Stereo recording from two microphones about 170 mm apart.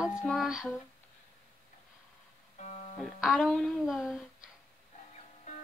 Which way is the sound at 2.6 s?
40° left (ahead or behind).